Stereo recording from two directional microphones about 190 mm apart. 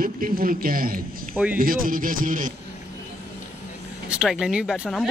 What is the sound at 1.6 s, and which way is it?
Speech, 45° right (ahead or behind).